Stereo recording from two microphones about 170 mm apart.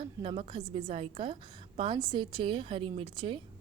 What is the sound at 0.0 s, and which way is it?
A woman's voice, 30° right (ahead or behind).